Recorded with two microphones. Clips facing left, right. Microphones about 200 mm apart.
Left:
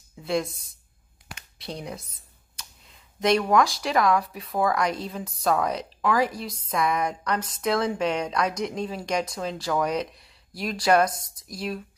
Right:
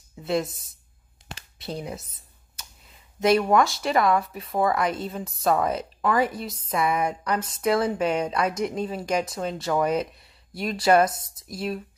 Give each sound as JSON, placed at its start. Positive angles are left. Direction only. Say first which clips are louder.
{"t": 0.2, "sound": "speech", "louder": "right 1 dB", "side_deg": -5}
{"t": 3.2, "sound": "speech", "louder": "right 1 dB", "side_deg": -5}